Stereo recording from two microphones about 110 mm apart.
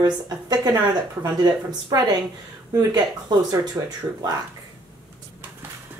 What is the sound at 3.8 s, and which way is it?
Speech, 20° right (ahead or behind).